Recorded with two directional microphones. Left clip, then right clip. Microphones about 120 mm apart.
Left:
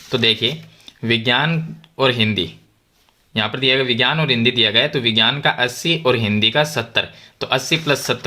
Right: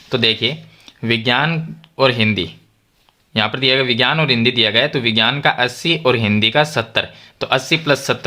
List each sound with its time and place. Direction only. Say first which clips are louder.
0.1 s speech: right 1 dB; 20° right (ahead or behind)